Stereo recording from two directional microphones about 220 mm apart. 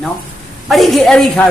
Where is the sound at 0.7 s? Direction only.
Centre (ahead or behind).